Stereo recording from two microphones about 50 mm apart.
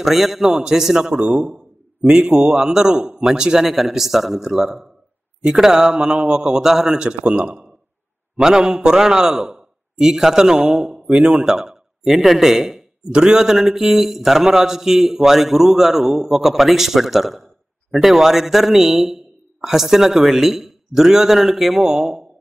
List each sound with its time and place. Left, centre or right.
0.0 s a man's voice: centre